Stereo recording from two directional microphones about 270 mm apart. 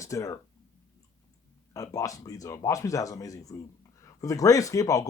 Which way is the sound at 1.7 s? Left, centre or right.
Centre.